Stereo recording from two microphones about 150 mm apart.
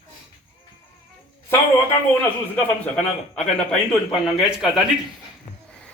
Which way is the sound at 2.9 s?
5° left (ahead or behind).